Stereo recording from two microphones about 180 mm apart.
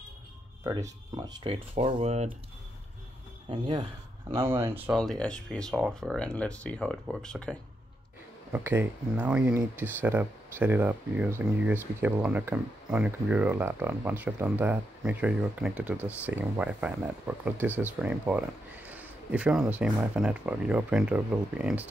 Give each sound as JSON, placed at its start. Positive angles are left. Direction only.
{"t": 0.7, "sound": "speech", "side_deg": -20}
{"t": 3.4, "sound": "speech", "side_deg": -30}
{"t": 4.9, "sound": "speech", "side_deg": 5}
{"t": 8.5, "sound": "speech", "side_deg": -10}